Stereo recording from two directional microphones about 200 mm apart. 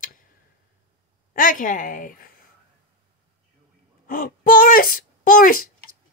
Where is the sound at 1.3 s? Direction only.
40° left (ahead or behind).